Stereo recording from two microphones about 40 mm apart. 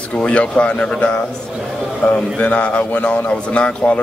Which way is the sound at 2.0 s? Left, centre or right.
Left.